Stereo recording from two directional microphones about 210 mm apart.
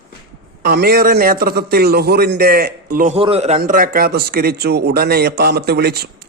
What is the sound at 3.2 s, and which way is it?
Speech, 30° right (ahead or behind).